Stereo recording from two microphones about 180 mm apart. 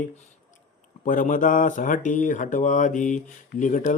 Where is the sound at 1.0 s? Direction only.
50° left (ahead or behind).